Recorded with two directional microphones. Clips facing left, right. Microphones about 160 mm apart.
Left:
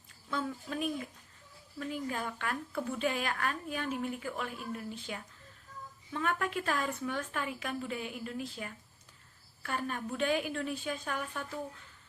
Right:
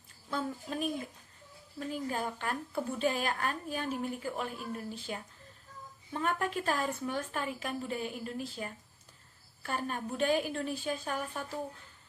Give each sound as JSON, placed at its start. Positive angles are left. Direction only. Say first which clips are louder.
{"t": 0.3, "sound": "a woman's voice", "louder": "even", "side_deg": -35}